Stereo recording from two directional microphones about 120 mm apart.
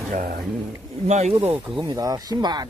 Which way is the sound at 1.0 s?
65° right (ahead or behind).